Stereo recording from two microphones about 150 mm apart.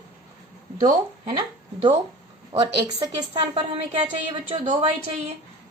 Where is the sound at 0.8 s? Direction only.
45° right (ahead or behind).